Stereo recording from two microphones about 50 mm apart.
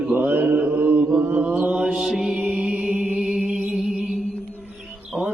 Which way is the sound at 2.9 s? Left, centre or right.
Right.